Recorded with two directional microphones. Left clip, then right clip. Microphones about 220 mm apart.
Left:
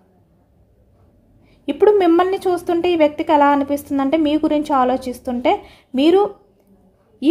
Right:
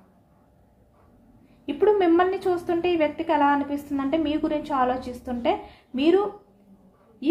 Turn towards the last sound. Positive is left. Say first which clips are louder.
# left 7 dB
turn(degrees=50)  # may be behind; listen again after turning